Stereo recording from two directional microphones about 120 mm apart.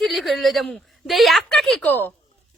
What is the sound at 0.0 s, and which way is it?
A woman's voice, centre (ahead or behind).